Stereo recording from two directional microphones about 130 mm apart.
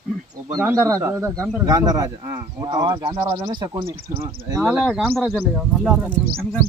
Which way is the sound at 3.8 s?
25° right (ahead or behind).